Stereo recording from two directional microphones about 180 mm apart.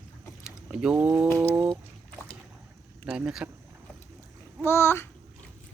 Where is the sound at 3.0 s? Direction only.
5° right (ahead or behind).